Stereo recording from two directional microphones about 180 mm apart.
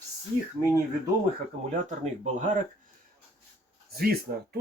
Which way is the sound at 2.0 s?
40° right (ahead or behind).